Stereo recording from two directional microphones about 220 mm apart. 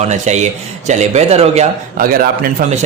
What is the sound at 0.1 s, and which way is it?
Speech, 30° right (ahead or behind).